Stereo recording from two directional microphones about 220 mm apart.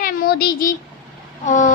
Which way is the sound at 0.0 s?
40° left (ahead or behind).